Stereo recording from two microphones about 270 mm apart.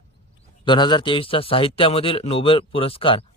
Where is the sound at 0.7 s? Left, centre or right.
Centre.